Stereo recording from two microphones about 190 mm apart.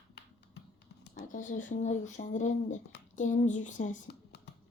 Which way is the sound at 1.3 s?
45° left (ahead or behind).